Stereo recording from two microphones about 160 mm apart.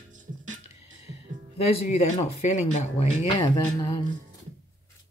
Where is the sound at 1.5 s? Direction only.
40° left (ahead or behind).